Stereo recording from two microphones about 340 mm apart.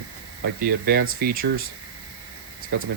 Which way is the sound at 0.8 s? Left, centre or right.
Right.